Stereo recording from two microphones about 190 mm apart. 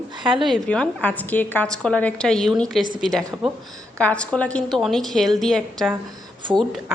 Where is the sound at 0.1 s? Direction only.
25° right (ahead or behind).